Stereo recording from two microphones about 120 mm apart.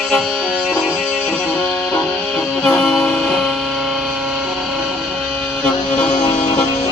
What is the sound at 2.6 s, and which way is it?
Music, 5° left (ahead or behind).